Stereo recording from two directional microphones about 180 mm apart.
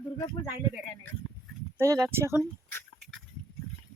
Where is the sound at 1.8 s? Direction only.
15° right (ahead or behind).